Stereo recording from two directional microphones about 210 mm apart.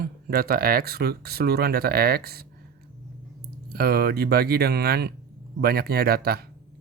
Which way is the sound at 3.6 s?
50° right (ahead or behind).